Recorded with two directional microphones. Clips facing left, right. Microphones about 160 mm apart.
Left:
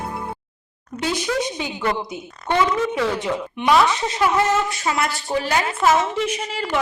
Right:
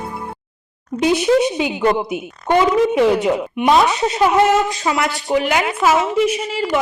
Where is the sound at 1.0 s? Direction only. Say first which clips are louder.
Right 9 dB; 20° right (ahead or behind).